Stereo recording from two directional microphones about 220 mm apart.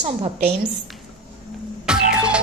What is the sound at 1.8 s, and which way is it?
Music, 5° right (ahead or behind).